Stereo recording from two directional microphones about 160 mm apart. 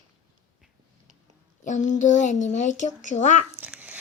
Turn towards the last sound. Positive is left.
turn(degrees=-10)  # may be behind; listen again after turning